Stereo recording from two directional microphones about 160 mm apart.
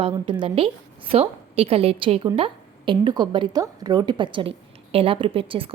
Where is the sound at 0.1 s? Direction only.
30° right (ahead or behind).